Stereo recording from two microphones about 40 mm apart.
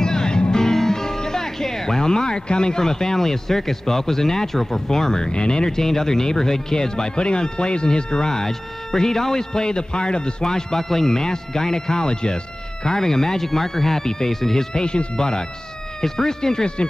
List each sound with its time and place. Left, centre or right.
0.0 s speech: centre
14.7 s speech: left